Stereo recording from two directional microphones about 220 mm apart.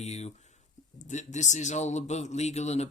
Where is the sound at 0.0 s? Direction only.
30° left (ahead or behind).